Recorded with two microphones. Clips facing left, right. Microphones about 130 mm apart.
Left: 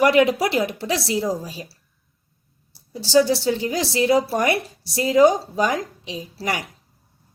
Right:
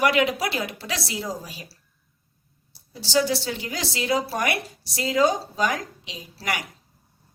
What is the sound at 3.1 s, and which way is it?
A woman's voice, 25° left (ahead or behind).